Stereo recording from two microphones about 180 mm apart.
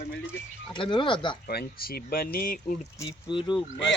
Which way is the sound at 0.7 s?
25° left (ahead or behind).